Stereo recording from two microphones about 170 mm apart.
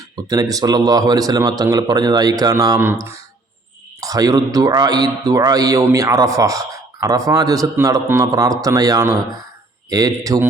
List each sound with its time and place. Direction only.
0.3 s a man's voice: 20° right (ahead or behind)